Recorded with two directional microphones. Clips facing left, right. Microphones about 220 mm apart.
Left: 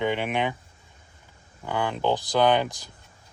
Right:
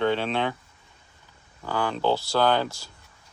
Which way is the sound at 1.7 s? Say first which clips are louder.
Right 1 dB; 20° left (ahead or behind).